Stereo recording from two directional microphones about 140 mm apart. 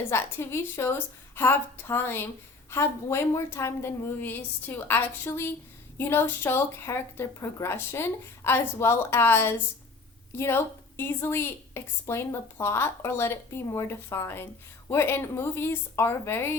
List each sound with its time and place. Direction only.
0.1 s a woman's voice: 15° left (ahead or behind)